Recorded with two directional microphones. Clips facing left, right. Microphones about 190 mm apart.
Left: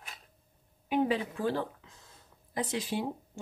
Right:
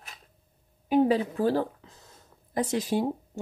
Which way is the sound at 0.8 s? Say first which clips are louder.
Right 6 dB; 40° right (ahead or behind).